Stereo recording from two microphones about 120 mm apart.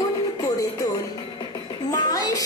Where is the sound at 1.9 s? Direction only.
30° left (ahead or behind).